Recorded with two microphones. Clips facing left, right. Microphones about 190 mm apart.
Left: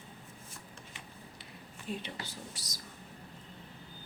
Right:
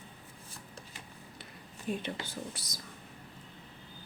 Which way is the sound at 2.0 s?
55° right (ahead or behind).